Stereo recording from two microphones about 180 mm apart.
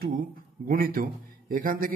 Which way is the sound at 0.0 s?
55° right (ahead or behind).